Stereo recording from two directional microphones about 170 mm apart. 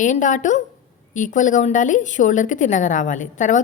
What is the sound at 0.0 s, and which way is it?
A woman's voice, 45° left (ahead or behind).